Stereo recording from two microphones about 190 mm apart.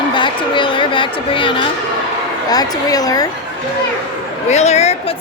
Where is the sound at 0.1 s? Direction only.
25° left (ahead or behind).